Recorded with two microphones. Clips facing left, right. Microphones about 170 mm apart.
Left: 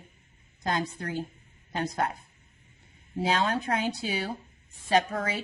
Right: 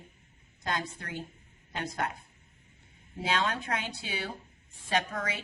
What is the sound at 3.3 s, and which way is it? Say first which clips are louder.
Speech: left 4 dB; 30° left (ahead or behind).